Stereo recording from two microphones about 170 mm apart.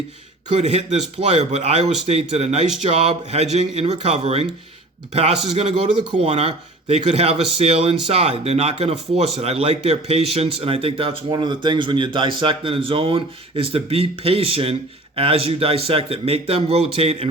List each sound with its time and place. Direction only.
0.4 s speech: 40° right (ahead or behind)